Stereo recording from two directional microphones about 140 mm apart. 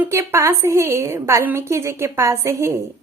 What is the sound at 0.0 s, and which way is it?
A woman's voice, 15° right (ahead or behind).